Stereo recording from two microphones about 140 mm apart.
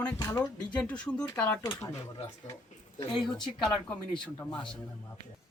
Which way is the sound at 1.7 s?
25° left (ahead or behind).